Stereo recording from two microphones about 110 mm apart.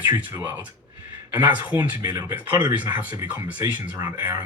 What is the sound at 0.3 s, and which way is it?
Speech, 15° right (ahead or behind).